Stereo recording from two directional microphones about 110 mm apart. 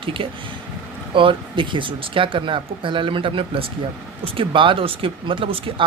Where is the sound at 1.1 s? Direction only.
50° right (ahead or behind).